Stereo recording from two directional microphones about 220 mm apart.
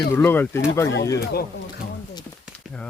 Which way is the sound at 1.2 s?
45° left (ahead or behind).